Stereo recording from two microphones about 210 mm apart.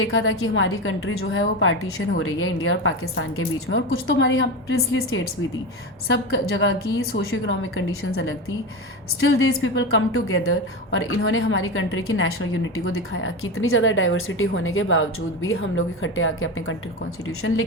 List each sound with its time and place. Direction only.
0.1 s speech: 70° left (ahead or behind)
1.2 s a woman's voice: 60° left (ahead or behind)
12.8 s speech: 80° left